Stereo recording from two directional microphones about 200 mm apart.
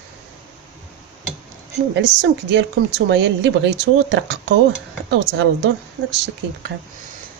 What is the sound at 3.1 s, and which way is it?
Speech, 60° right (ahead or behind).